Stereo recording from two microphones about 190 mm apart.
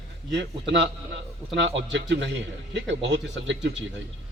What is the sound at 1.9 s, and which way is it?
A man's voice, 70° right (ahead or behind).